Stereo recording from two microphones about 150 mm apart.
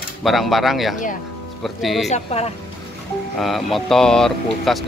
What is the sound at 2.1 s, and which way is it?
Speech, 45° left (ahead or behind).